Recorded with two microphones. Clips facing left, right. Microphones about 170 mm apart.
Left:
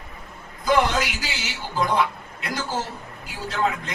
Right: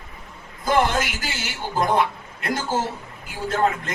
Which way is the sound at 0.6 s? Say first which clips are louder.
Even; 50° right (ahead or behind).